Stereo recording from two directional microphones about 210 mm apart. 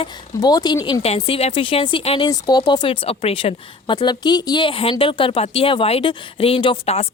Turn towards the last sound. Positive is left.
turn(degrees=25)  # may be behind; listen again after turning